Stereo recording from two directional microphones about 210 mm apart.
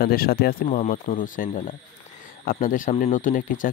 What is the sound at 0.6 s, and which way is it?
Speech, 35° left (ahead or behind).